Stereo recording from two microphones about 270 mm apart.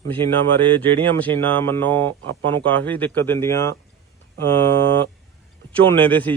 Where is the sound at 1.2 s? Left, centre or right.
Centre.